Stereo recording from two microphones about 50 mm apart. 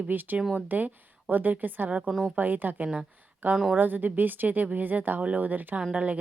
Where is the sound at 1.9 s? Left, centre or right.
Right.